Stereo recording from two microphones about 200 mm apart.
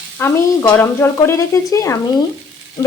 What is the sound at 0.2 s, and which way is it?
Speech, 10° left (ahead or behind).